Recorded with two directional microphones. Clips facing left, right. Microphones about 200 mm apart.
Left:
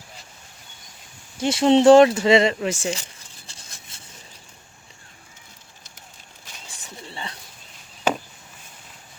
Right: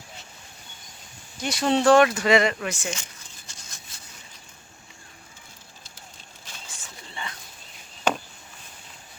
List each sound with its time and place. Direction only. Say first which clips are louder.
1.4 s speech: left 7 dB; 25° left (ahead or behind)
3.4 s a sound: left 1 dB; 30° left (ahead or behind)
6.7 s pigeon: left 4 dB; 30° left (ahead or behind)